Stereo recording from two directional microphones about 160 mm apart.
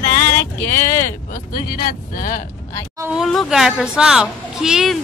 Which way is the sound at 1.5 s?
65° left (ahead or behind).